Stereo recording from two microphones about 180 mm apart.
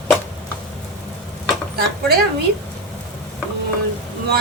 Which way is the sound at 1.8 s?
60° right (ahead or behind).